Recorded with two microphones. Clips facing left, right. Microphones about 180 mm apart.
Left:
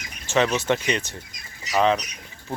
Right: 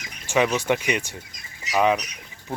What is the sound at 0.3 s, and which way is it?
Speech, 10° right (ahead or behind).